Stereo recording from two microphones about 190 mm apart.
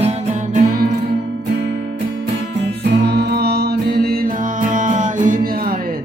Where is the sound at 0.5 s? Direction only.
50° right (ahead or behind).